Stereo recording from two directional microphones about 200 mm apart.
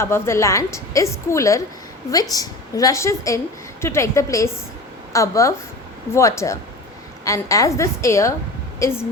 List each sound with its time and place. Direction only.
0.0 s a woman's voice: 15° left (ahead or behind)